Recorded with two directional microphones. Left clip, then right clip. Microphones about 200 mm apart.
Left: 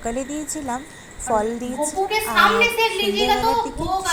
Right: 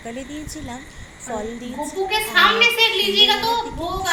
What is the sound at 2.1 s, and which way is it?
A woman's voice, 50° left (ahead or behind).